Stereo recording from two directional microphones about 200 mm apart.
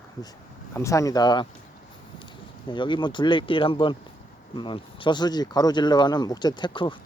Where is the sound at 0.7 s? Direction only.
15° left (ahead or behind).